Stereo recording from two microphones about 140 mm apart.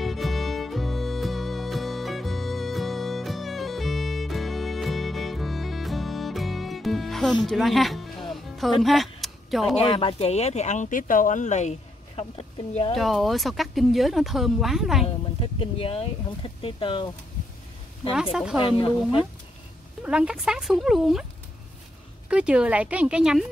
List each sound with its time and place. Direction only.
0.0 s music: centre (ahead or behind)
9.8 s speech: 40° left (ahead or behind)
12.9 s speech: centre (ahead or behind)
15.6 s speech: 40° left (ahead or behind)
18.1 s speech: 5° right (ahead or behind)
18.6 s speech: 40° left (ahead or behind)
20.0 s speech: 5° right (ahead or behind)
22.3 s speech: 5° right (ahead or behind)